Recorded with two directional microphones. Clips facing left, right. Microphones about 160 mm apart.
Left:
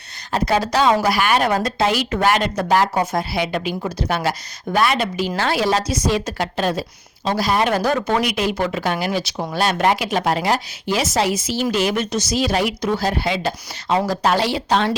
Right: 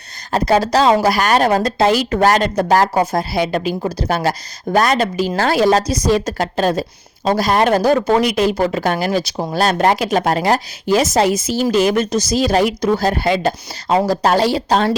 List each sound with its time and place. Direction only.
0.3 s a woman's voice: 40° right (ahead or behind)